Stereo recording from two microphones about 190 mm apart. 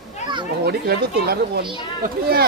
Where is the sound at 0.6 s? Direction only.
55° right (ahead or behind).